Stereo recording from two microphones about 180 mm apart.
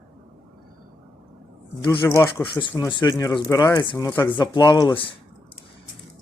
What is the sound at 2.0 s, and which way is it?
Speech, 15° left (ahead or behind).